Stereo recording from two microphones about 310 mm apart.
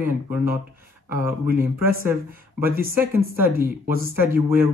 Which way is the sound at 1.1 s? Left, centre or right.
Centre.